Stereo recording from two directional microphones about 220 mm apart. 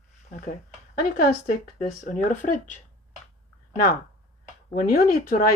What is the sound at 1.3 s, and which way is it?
Speech, 35° left (ahead or behind).